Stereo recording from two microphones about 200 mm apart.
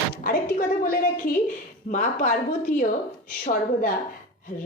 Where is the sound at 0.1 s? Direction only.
45° left (ahead or behind).